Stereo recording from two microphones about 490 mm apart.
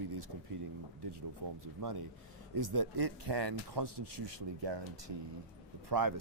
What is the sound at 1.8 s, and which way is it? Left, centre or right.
Speech, right.